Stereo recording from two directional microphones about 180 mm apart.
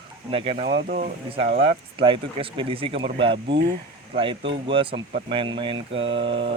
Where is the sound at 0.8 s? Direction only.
55° right (ahead or behind).